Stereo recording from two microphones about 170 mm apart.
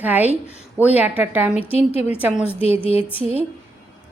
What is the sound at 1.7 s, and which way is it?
Speech, 35° left (ahead or behind).